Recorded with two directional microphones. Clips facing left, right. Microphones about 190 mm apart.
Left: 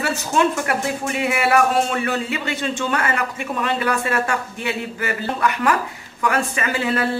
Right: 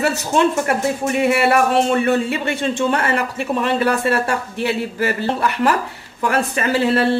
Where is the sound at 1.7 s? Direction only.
25° right (ahead or behind).